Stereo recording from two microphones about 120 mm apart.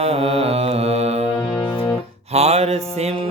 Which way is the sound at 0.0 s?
55° right (ahead or behind).